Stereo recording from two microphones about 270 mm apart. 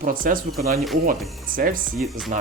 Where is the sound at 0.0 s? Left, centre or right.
Right.